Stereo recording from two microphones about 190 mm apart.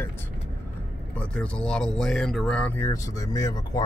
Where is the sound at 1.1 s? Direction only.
5° left (ahead or behind).